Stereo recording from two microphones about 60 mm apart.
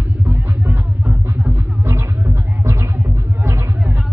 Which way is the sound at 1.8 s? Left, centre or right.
Right.